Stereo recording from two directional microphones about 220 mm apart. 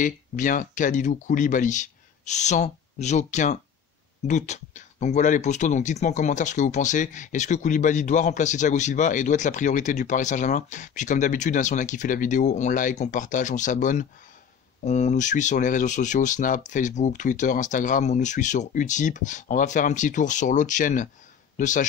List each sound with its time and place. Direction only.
0.0 s speech: 35° left (ahead or behind)